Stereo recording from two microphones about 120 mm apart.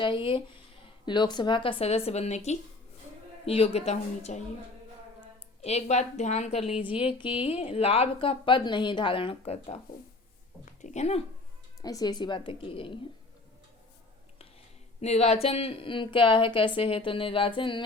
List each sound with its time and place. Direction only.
0.0 s a woman's voice: 45° left (ahead or behind); by 2.6 s 65° left (ahead or behind)
3.4 s a woman's voice: 55° left (ahead or behind)
5.6 s a woman's voice: 70° left (ahead or behind)
10.8 s speech: 80° left
11.8 s a woman's voice: 30° left (ahead or behind); by 13.0 s 45° left (ahead or behind)
15.0 s a woman's voice: 60° left (ahead or behind); by 17.8 s 45° left (ahead or behind)